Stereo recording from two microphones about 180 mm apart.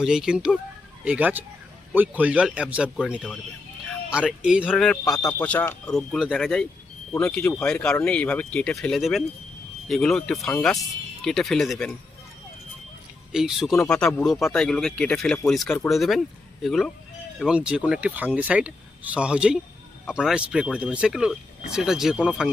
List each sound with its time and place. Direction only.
0.0 s speech: 5° right (ahead or behind)
5.0 s speech: 20° left (ahead or behind)
5.4 s speech: 10° left (ahead or behind)
13.3 s speech: 5° right (ahead or behind)